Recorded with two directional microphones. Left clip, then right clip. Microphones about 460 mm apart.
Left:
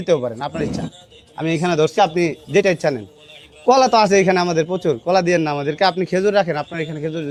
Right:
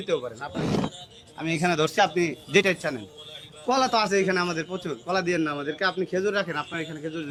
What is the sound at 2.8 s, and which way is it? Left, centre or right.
A man's voice, left.